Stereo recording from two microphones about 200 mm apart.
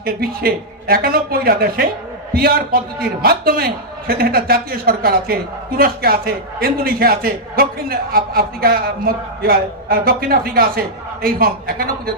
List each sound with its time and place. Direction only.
0.0 s a man's voice: 50° right (ahead or behind)